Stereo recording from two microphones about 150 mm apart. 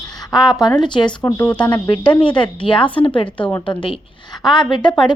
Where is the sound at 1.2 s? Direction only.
20° left (ahead or behind).